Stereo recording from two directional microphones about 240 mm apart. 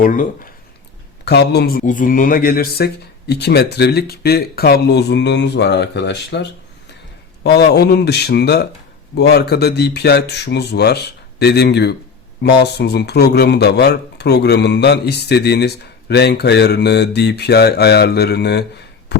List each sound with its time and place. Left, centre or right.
0.0 s speech: left